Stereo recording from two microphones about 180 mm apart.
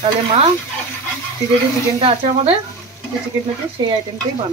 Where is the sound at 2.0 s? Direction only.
30° right (ahead or behind).